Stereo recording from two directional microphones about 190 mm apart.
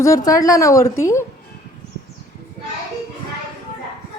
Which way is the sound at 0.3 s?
15° left (ahead or behind).